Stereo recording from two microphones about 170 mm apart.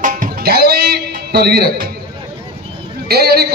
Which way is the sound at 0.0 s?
50° right (ahead or behind).